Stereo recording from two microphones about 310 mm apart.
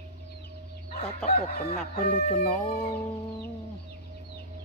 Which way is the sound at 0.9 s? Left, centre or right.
Left.